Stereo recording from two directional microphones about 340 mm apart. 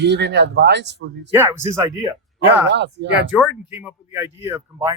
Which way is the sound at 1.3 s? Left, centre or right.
Centre.